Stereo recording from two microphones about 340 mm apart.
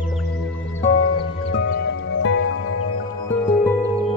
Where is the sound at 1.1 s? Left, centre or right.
Left.